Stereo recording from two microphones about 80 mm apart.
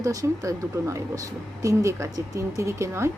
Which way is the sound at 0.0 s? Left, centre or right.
Right.